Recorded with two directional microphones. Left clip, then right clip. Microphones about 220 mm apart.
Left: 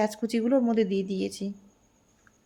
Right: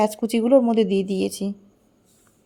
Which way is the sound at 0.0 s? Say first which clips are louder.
Right 6 dB; 25° right (ahead or behind).